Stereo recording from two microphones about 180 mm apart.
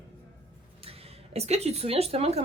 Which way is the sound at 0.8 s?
35° right (ahead or behind).